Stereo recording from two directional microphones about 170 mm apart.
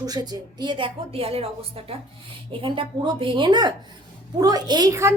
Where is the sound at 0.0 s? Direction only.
20° right (ahead or behind).